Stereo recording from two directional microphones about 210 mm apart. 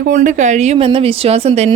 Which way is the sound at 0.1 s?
35° right (ahead or behind).